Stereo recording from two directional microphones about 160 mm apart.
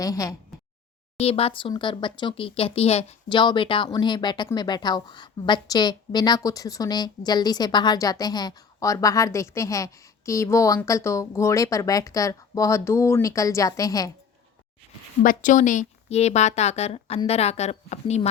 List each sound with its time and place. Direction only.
0.0 s a woman's voice: 20° left (ahead or behind)
1.2 s speech: 35° left (ahead or behind)
3.2 s a woman's voice: 30° left (ahead or behind)
15.2 s a woman's voice: 55° left (ahead or behind)